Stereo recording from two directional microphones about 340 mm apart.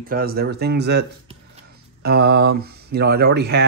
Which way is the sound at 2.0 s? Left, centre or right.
Right.